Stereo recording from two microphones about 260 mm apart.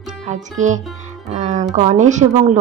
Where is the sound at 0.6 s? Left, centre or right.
Right.